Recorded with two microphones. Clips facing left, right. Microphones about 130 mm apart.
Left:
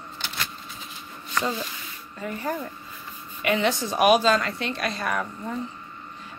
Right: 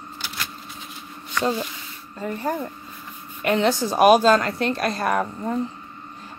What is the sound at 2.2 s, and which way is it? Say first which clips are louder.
Speech: right 3 dB; 30° right (ahead or behind).